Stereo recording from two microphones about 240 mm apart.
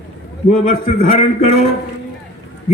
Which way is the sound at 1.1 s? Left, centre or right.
Left.